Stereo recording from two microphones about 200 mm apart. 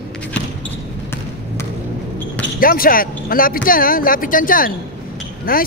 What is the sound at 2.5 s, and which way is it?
Speech, 45° left (ahead or behind).